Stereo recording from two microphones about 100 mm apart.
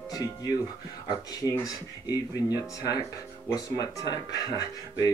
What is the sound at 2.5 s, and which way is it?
Speech, 40° left (ahead or behind).